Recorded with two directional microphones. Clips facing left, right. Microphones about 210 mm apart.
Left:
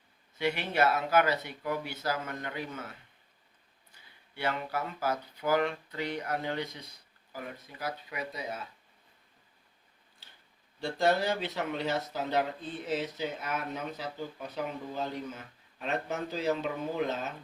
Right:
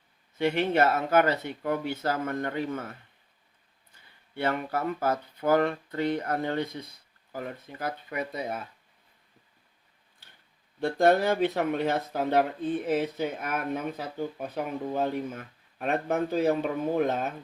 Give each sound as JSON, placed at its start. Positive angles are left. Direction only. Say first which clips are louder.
{"t": 0.3, "sound": "speech", "louder": "right 5 dB", "side_deg": -50}
{"t": 4.4, "sound": "speech", "louder": "right 4 dB", "side_deg": -55}
{"t": 10.8, "sound": "speech", "louder": "right 6 dB", "side_deg": -55}